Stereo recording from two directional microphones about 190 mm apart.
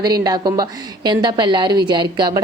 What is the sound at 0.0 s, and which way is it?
A woman's voice, 20° right (ahead or behind).